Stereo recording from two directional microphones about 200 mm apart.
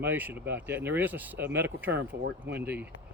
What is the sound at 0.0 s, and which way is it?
Speech, 10° right (ahead or behind).